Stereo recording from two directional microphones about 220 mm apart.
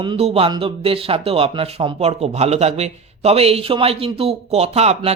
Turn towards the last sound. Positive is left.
turn(degrees=-30)  # may be behind; listen again after turning